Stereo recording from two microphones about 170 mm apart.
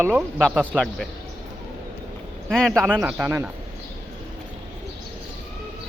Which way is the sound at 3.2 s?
15° right (ahead or behind).